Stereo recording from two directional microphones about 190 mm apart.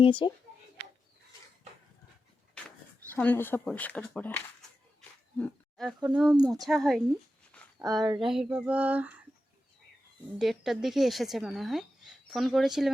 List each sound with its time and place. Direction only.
0.0 s speech: 25° left (ahead or behind)
3.2 s speech: 10° left (ahead or behind)
4.9 s a sound: centre (ahead or behind)
6.1 s speech: centre (ahead or behind)
8.0 s speech: 20° right (ahead or behind)
8.3 s a sound: 5° right (ahead or behind)
10.3 s speech: centre (ahead or behind)